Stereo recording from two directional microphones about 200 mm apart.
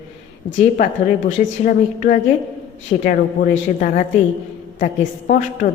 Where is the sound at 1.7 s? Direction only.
40° left (ahead or behind).